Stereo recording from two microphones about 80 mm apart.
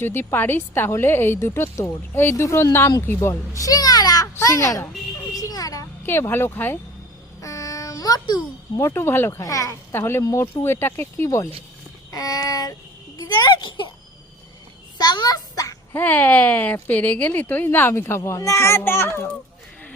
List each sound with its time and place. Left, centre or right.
0.0 s a woman's voice: left
5.3 s vehicle: left
6.3 s a woman's voice: left
7.4 s a sound: left
9.0 s speech: left
9.4 s speech: left
9.9 s speech: left
12.1 s speech: left
13.1 s a child's voice: left
14.9 s a sound: left
16.0 s a woman's voice: left
18.2 s speech: left
18.8 s a woman's voice: left